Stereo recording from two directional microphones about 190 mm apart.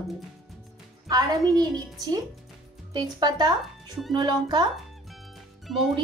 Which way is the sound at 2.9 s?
20° right (ahead or behind).